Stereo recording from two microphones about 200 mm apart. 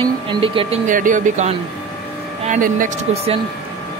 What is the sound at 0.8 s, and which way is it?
Speech, 40° right (ahead or behind).